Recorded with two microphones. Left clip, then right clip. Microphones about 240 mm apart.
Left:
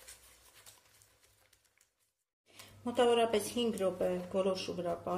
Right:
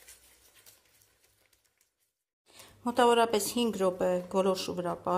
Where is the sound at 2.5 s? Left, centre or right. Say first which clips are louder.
Right 6 dB; right.